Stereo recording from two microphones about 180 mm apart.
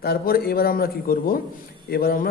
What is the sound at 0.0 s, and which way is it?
A man's voice, 60° left (ahead or behind).